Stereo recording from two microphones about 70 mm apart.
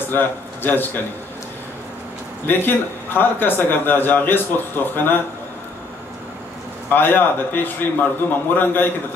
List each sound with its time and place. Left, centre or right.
0.1 s a man's voice: left
2.4 s a man's voice: left
6.9 s a man's voice: left